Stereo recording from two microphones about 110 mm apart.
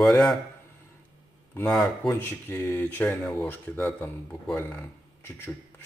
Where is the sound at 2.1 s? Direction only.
20° left (ahead or behind).